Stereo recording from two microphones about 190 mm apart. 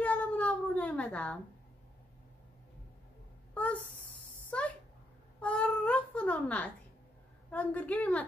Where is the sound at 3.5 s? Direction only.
10° left (ahead or behind).